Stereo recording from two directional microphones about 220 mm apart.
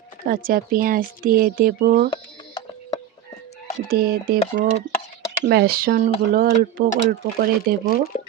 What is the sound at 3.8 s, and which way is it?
Speech, 45° right (ahead or behind).